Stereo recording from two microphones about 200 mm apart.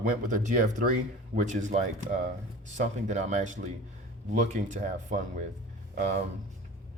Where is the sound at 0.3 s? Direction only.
40° right (ahead or behind).